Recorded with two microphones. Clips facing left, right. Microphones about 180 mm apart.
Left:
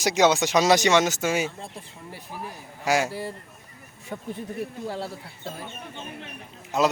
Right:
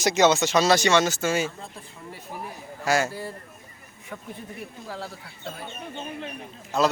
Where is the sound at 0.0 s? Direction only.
10° left (ahead or behind).